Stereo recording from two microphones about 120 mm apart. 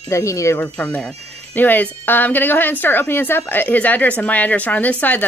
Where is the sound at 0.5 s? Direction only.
15° left (ahead or behind).